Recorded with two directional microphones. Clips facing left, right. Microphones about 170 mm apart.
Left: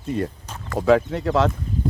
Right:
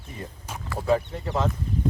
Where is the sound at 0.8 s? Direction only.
90° left.